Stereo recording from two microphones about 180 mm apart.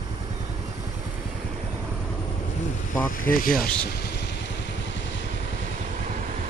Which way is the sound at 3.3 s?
50° left (ahead or behind).